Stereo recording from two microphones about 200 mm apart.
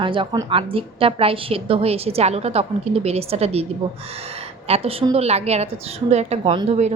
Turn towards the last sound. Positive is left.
turn(degrees=-35)  # may be behind; listen again after turning